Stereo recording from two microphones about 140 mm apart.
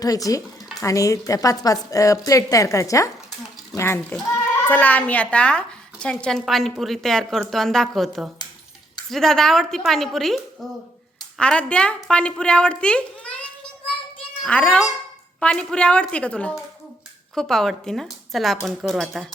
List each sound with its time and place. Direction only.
0.0 s a woman's voice: 25° left (ahead or behind); by 13.1 s 5° left (ahead or behind)
14.4 s a woman's voice: 10° left (ahead or behind)